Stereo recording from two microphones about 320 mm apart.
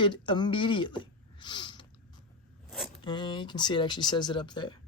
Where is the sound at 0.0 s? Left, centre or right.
Centre.